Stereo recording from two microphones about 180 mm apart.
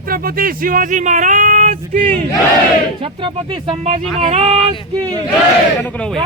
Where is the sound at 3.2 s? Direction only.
30° right (ahead or behind).